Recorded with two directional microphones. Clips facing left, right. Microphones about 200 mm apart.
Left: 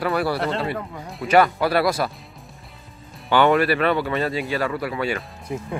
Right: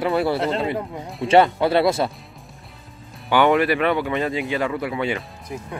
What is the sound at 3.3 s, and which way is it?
Speech, 15° right (ahead or behind).